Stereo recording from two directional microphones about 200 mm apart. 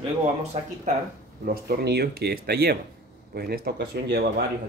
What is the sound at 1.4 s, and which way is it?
Speech, 50° right (ahead or behind).